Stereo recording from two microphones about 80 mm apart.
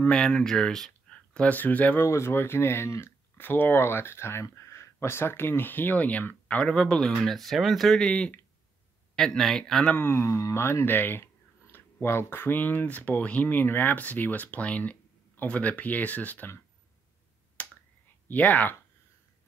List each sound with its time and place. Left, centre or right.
0.1 s speech: centre
1.5 s speech: centre
2.0 s speech: left; by 9.9 s centre
9.9 s speech: left
17.6 s finger snapping: centre
18.3 s speech: left